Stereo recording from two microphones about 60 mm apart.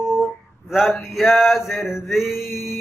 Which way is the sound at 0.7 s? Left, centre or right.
Centre.